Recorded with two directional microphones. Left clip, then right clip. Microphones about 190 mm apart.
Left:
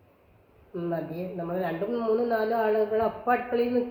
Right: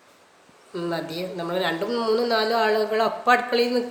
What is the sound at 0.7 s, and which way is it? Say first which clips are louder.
A woman's voice: right 3 dB; 15° right (ahead or behind).